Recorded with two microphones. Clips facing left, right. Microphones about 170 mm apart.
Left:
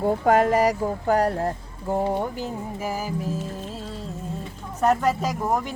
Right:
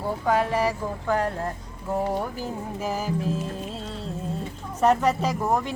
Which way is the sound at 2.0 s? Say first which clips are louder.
Left 2 dB; 20° left (ahead or behind).